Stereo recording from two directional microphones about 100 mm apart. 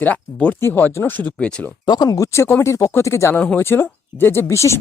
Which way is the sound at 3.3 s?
10° left (ahead or behind).